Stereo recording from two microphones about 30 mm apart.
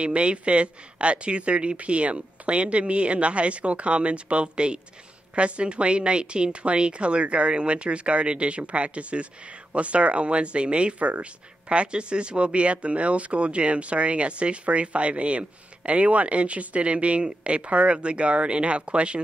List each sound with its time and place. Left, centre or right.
0.0 s a woman's voice: right
11.7 s a woman's voice: right